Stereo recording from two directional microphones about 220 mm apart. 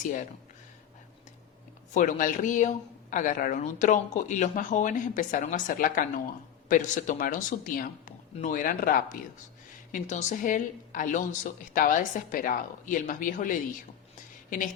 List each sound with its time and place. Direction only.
0.0 s speech: 35° left (ahead or behind)
1.9 s speech: 35° left (ahead or behind)